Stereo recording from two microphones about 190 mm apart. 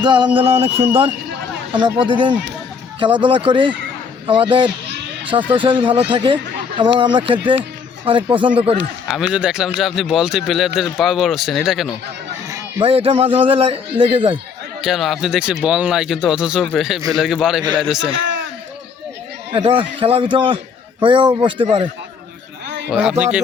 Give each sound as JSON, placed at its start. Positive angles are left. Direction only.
{"t": 0.0, "sound": "speech", "side_deg": -25}
{"t": 9.0, "sound": "speech", "side_deg": -5}
{"t": 12.5, "sound": "honk", "side_deg": -15}
{"t": 12.8, "sound": "speech", "side_deg": -30}
{"t": 14.8, "sound": "speech", "side_deg": 0}
{"t": 18.2, "sound": "a sound", "side_deg": -70}
{"t": 19.5, "sound": "speech", "side_deg": -25}
{"t": 22.6, "sound": "a sound", "side_deg": -65}
{"t": 22.9, "sound": "speech", "side_deg": 0}